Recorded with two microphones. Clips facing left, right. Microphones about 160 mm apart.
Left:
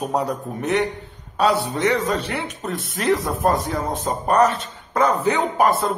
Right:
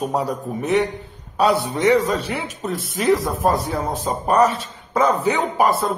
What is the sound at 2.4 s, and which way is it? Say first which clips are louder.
A man's voice: right 1 dB; centre (ahead or behind).